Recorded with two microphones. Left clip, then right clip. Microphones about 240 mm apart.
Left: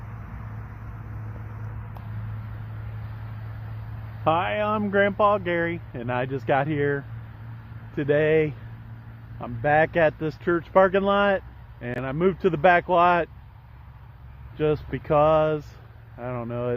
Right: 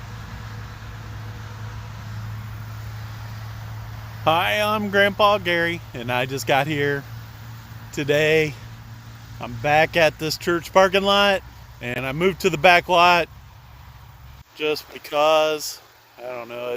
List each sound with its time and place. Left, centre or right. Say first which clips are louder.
4.2 s speech: right 4 dB; right
14.6 s speech: even; centre